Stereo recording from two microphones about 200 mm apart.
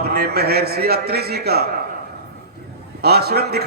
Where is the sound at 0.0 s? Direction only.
50° right (ahead or behind).